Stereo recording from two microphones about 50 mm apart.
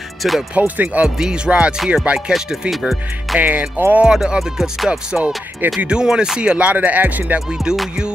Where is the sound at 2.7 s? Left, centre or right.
Centre.